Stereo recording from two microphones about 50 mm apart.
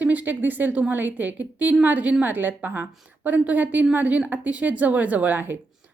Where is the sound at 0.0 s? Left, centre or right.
Right.